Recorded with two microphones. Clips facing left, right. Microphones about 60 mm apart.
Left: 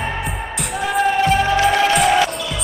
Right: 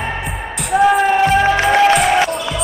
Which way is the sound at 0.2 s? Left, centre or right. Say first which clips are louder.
Right 1 dB; centre.